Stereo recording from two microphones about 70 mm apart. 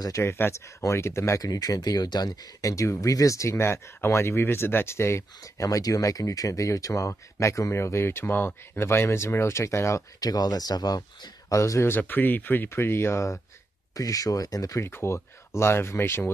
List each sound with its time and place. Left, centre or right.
0.2 s speech: left
1.4 s speech: left
5.4 s speech: left
10.2 s speech: left
11.5 s speech: left
11.8 s speech: left
13.9 s speech: left
14.8 s speech: left